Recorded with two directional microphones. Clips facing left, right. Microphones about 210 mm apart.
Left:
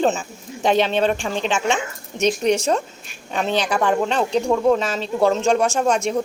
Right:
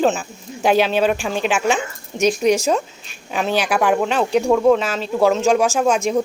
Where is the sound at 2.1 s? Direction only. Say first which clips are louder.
Right 2 dB; 35° right (ahead or behind).